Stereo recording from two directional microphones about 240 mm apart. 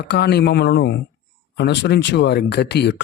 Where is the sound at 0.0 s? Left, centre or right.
Left.